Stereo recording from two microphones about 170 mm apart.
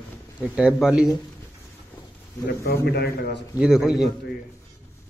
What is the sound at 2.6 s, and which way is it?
Speech, 65° left (ahead or behind).